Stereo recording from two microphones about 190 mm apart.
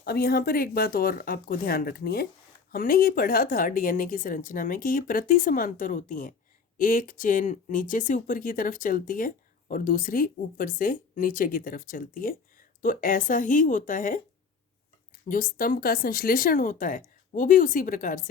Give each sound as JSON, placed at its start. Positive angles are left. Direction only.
{"t": 0.0, "sound": "speech", "side_deg": 55}
{"t": 15.3, "sound": "speech", "side_deg": 45}